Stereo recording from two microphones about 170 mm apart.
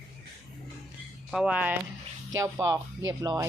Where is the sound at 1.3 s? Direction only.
5° right (ahead or behind).